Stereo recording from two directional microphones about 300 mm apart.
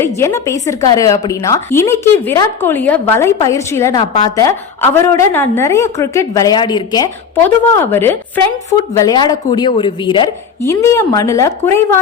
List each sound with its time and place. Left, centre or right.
0.0 s a woman's voice: centre